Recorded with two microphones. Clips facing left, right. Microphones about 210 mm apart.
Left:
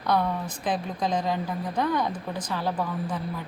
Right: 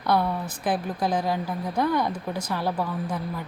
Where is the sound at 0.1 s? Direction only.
10° right (ahead or behind).